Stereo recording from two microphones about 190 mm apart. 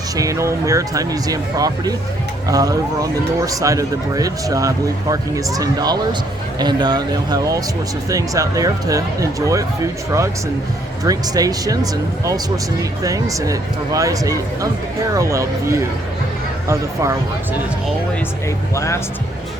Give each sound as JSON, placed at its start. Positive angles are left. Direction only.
{"t": 0.2, "sound": "speech", "side_deg": -15}
{"t": 11.0, "sound": "speech", "side_deg": -20}
{"t": 18.7, "sound": "speech", "side_deg": 15}